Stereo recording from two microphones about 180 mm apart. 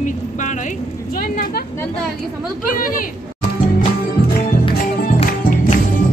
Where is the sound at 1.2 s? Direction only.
55° left (ahead or behind).